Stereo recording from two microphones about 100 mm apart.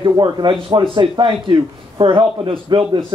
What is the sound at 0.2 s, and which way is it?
Speech, 50° right (ahead or behind).